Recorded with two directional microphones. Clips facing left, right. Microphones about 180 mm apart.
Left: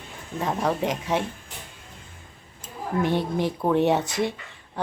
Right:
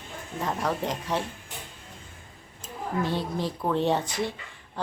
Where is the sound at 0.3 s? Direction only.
20° left (ahead or behind).